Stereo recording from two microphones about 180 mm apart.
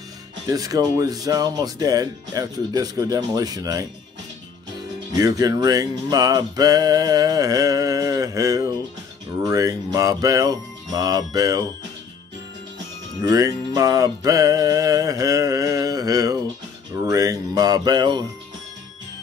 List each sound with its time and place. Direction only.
0.5 s music: 20° right (ahead or behind)
5.1 s music: 20° right (ahead or behind)
13.2 s music: 20° right (ahead or behind)